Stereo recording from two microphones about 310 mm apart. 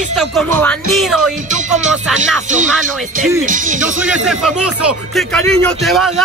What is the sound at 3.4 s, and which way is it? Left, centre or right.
Speech, right.